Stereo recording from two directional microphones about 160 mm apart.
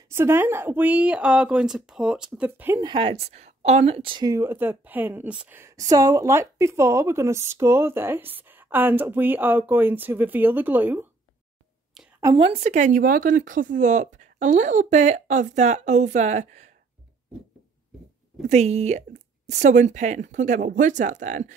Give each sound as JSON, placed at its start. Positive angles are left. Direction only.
{"t": 0.1, "sound": "a woman's voice", "side_deg": -15}
{"t": 2.8, "sound": "speech", "side_deg": -30}
{"t": 4.3, "sound": "a woman's voice", "side_deg": -15}
{"t": 12.0, "sound": "a sound", "side_deg": -5}
{"t": 12.4, "sound": "speech", "side_deg": -40}
{"t": 18.5, "sound": "speech", "side_deg": -45}